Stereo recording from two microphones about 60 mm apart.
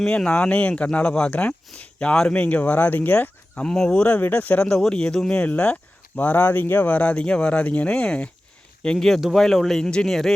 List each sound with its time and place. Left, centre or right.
0.3 s speech: left
3.7 s speech: centre
4.0 s speech: left
4.6 s speech: centre
5.4 s speech: left; by 10.3 s centre